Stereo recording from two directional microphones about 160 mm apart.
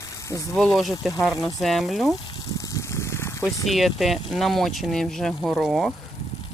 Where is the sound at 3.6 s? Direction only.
Centre (ahead or behind).